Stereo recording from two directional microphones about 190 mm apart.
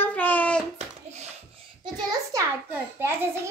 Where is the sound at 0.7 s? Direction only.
35° right (ahead or behind).